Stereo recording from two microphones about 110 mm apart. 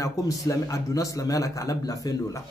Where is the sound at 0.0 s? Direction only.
30° left (ahead or behind).